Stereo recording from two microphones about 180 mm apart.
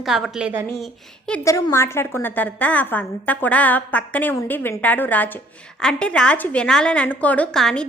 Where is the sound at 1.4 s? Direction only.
15° left (ahead or behind).